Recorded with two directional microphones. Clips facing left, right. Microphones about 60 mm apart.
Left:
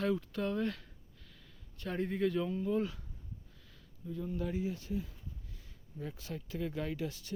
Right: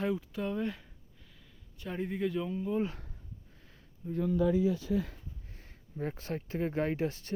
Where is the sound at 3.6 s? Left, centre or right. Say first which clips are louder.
Right 5 dB; right.